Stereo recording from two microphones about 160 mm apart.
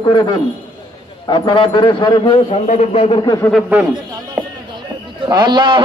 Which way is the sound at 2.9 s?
35° left (ahead or behind).